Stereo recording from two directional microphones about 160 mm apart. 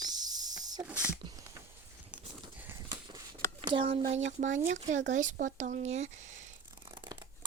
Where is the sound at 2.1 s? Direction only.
10° right (ahead or behind).